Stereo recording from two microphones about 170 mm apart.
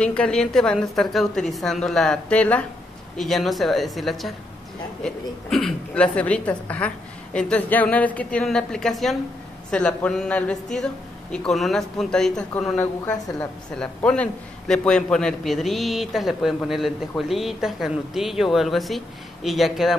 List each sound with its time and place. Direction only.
0.0 s a man's voice: 5° left (ahead or behind)
13.7 s a man's voice: 5° left (ahead or behind)